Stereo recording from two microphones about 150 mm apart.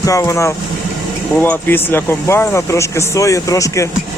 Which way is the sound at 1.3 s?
10° left (ahead or behind).